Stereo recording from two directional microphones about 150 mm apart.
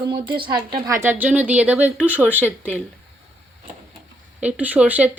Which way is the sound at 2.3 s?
15° left (ahead or behind).